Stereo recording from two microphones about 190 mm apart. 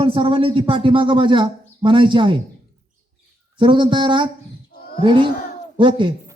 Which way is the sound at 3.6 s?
25° right (ahead or behind).